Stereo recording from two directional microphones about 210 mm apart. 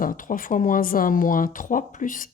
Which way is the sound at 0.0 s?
40° left (ahead or behind).